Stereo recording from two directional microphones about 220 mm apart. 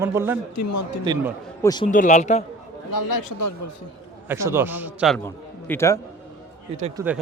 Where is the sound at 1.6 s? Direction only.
20° left (ahead or behind).